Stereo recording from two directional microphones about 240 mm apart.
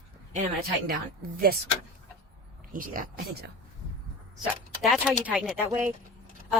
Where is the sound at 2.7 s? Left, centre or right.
Right.